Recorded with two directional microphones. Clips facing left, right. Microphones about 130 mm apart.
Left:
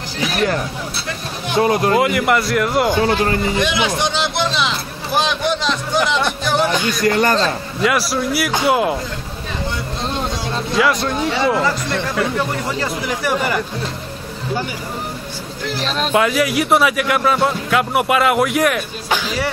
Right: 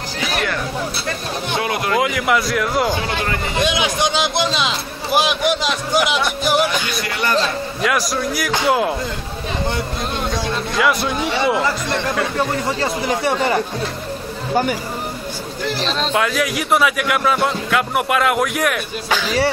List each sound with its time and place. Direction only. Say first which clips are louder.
1.6 s speech: left 8 dB; 40° left (ahead or behind)
2.0 s speech: left 2 dB; centre (ahead or behind)
3.0 s speech: left 6 dB; 35° left (ahead or behind)
3.5 s speech: left 1 dB; 20° right (ahead or behind)
7.0 s a man's voice: left 5 dB; 45° left (ahead or behind)
7.8 s speech: left 2 dB; 5° left (ahead or behind)
10.8 s speech: left 1 dB; 5° right (ahead or behind)
12.8 s speech: right 4 dB; 25° right (ahead or behind)
14.5 s speech: right 5 dB; 50° right (ahead or behind)
15.8 s speech: left 3 dB; 5° left (ahead or behind)